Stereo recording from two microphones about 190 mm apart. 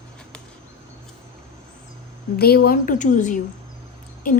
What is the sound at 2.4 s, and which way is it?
A woman's voice, 55° left (ahead or behind).